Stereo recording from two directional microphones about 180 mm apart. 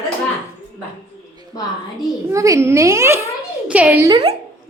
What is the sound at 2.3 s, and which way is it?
A child's voice, 15° right (ahead or behind).